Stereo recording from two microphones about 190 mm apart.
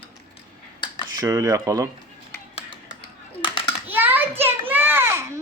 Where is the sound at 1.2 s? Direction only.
20° right (ahead or behind).